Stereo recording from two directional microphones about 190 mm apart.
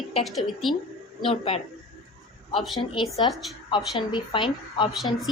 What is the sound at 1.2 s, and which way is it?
Speech, 30° left (ahead or behind).